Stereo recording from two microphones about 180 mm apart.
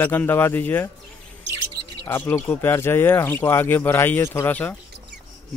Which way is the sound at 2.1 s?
10° left (ahead or behind).